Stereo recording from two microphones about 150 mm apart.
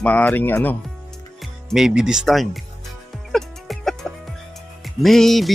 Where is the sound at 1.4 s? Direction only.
Centre (ahead or behind).